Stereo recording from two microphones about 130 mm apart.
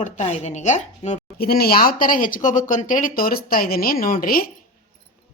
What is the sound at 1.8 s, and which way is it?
Speech, 90° left.